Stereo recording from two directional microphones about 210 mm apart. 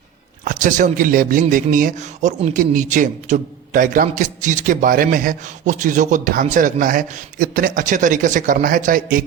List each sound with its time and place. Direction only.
0.4 s speech: 40° right (ahead or behind)